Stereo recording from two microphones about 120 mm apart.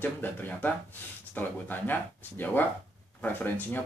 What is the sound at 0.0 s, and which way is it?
Speech, 15° left (ahead or behind).